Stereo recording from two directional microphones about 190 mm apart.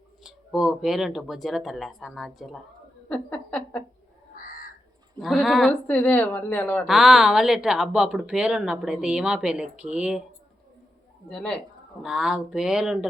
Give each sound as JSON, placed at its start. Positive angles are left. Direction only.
{"t": 0.2, "sound": "a woman's voice", "side_deg": 0}
{"t": 4.4, "sound": "crow", "side_deg": 45}
{"t": 5.2, "sound": "a woman's voice", "side_deg": 0}
{"t": 11.3, "sound": "a woman's voice", "side_deg": 5}